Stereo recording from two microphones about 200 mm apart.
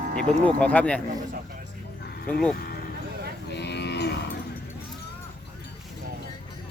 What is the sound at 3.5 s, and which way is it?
Cattle, 55° left (ahead or behind).